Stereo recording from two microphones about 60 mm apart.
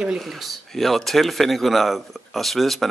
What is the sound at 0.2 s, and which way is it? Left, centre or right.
Speech, centre.